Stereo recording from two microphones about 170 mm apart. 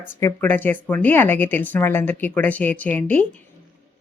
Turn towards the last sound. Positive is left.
turn(degrees=10)  # may be behind; listen again after turning